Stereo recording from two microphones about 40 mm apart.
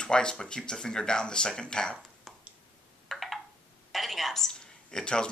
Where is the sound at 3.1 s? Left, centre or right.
Centre.